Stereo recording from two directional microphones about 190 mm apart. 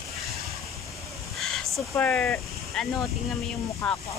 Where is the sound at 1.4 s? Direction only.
Centre (ahead or behind).